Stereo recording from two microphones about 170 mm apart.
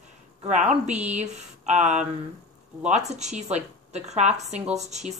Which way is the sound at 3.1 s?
40° right (ahead or behind).